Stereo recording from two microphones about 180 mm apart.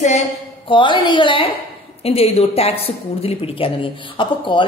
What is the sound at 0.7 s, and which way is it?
A woman's voice, 25° left (ahead or behind).